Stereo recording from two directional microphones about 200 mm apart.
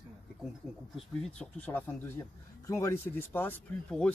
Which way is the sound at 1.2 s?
10° left (ahead or behind).